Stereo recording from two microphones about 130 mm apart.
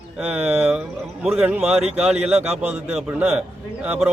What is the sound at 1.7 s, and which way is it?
Speech, 55° right (ahead or behind).